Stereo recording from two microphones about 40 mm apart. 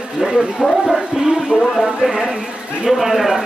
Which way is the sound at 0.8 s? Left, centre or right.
Centre.